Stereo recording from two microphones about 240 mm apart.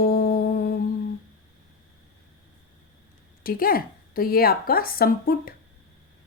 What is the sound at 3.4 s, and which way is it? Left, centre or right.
Music, left.